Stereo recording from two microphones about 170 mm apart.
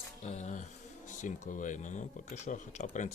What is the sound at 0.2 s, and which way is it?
Speech, 40° left (ahead or behind).